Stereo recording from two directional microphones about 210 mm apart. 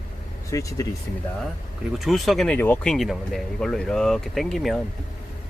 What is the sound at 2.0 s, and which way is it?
Speech, centre (ahead or behind).